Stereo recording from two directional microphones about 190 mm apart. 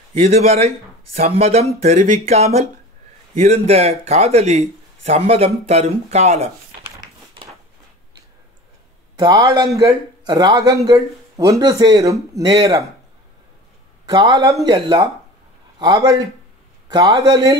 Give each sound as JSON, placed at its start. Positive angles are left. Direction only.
{"t": 0.1, "sound": "speech", "side_deg": -35}
{"t": 9.1, "sound": "a man's voice", "side_deg": -20}
{"t": 14.0, "sound": "a man's voice", "side_deg": -20}